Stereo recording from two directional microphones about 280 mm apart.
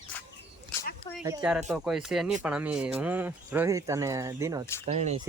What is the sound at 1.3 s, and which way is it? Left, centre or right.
Speech, centre.